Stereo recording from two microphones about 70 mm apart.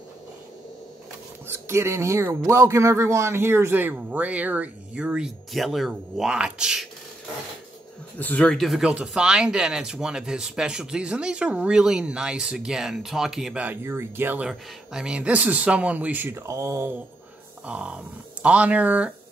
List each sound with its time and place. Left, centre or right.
1.5 s a man's voice: right; by 5.3 s centre
5.5 s speech: centre
8.2 s speech: left
8.5 s speech: centre
13.8 s a man's voice: right
14.5 s speech: centre
16.3 s speech: right
17.6 s speech: centre